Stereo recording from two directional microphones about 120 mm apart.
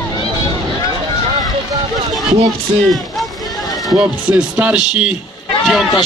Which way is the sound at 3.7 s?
Centre (ahead or behind).